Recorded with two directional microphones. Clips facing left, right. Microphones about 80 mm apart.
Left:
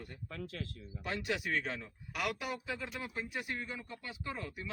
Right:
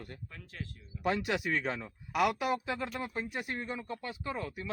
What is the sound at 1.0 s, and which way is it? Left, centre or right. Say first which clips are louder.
Speech: right 6 dB; right.